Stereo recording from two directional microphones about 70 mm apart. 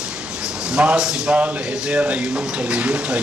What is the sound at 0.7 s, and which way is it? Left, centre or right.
Speech, centre.